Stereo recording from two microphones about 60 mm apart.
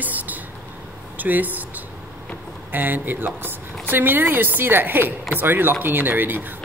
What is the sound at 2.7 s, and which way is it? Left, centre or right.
Speech, right.